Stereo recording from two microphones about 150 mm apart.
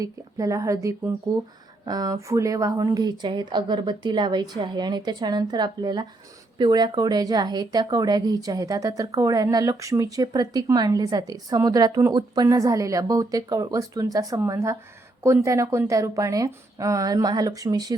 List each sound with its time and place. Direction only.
0.0 s speech: 20° right (ahead or behind)